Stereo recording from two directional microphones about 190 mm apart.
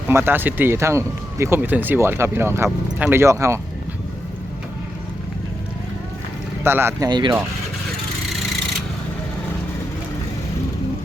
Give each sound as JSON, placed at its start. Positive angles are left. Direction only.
{"t": 0.1, "sound": "speech", "side_deg": -10}
{"t": 6.7, "sound": "speech", "side_deg": -10}